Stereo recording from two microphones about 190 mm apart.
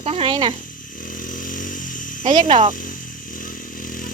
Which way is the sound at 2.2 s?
25° right (ahead or behind).